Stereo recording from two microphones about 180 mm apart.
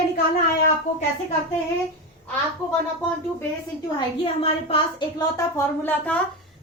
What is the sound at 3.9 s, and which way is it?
A woman's voice, 30° left (ahead or behind).